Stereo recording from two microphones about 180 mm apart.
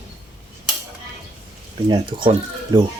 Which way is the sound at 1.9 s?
25° right (ahead or behind).